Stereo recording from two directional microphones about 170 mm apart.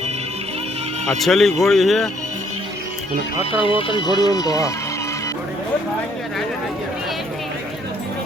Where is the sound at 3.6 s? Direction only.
30° left (ahead or behind).